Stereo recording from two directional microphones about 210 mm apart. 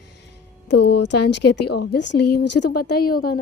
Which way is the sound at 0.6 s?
55° left (ahead or behind).